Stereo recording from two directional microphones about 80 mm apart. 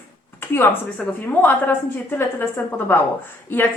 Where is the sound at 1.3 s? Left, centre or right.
Left.